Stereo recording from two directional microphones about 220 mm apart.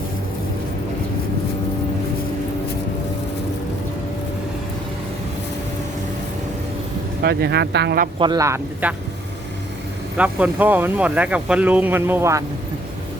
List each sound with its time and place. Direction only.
7.2 s speech: 50° right (ahead or behind)
8.2 s speech: 15° right (ahead or behind)
10.2 s speech: 5° right (ahead or behind)